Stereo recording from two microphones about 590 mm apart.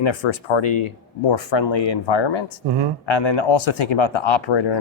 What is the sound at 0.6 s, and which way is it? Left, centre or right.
Speech, left.